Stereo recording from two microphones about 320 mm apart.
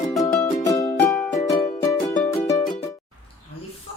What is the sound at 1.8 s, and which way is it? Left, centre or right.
Music, centre.